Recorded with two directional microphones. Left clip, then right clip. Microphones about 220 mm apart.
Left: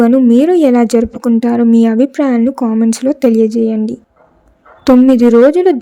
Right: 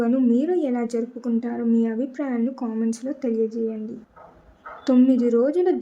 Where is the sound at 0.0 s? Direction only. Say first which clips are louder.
Left 12 dB; 40° left (ahead or behind).